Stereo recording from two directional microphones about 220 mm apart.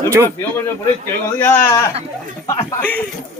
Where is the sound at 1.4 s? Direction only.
10° left (ahead or behind).